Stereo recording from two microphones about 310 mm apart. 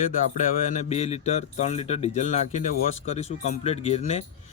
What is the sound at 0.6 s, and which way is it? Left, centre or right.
Speech, left.